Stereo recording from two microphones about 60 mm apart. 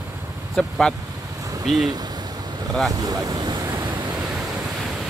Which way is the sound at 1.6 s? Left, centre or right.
Centre.